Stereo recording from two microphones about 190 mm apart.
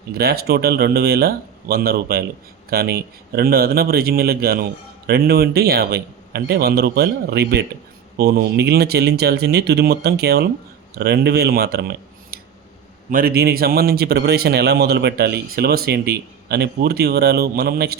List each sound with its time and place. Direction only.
0.2 s speech: 55° right (ahead or behind)